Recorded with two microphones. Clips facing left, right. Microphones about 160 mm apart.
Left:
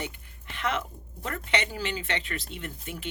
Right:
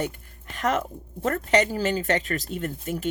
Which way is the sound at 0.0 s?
40° right (ahead or behind).